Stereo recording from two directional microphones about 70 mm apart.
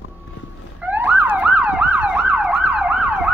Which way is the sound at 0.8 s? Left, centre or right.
Right.